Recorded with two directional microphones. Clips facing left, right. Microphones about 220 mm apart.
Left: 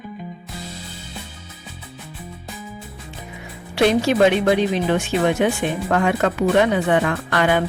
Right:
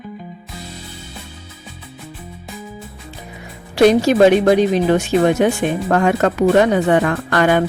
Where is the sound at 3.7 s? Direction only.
40° right (ahead or behind).